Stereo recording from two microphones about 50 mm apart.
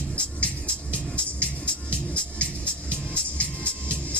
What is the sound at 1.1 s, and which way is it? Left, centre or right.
Music, left.